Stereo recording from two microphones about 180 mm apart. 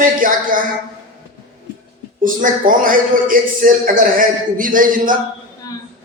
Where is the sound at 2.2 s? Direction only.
50° right (ahead or behind).